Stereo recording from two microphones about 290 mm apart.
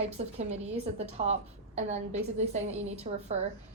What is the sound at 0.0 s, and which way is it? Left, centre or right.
Speech, right.